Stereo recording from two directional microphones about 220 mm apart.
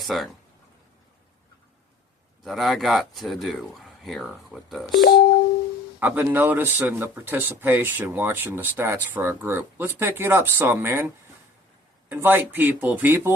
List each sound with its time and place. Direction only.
0.0 s speech: centre (ahead or behind)
2.4 s speech: centre (ahead or behind)
4.9 s speech: 45° left (ahead or behind)
6.0 s speech: 10° right (ahead or behind)
12.0 s speech: 10° right (ahead or behind)